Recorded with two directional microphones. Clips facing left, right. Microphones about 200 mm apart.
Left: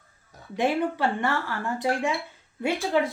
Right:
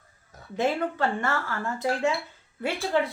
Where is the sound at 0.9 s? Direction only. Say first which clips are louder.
Left 1 dB; 15° left (ahead or behind).